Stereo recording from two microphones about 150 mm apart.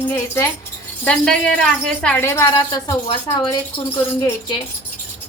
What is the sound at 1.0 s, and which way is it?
Speech, 5° left (ahead or behind).